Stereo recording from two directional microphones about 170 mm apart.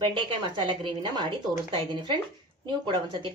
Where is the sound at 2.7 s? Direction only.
30° right (ahead or behind).